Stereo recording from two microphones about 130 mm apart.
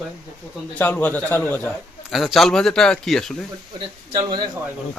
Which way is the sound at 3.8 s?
40° right (ahead or behind).